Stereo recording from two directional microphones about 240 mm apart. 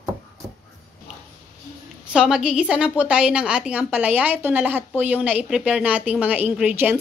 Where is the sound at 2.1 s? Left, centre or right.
Centre.